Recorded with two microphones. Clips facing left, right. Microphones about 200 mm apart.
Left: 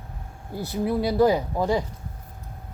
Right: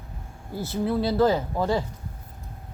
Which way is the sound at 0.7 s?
15° left (ahead or behind).